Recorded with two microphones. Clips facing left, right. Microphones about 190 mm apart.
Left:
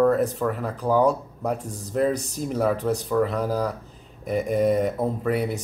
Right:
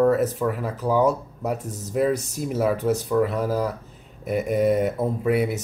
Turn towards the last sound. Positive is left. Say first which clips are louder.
# right 2 dB
turn(degrees=-5)  # may be behind; listen again after turning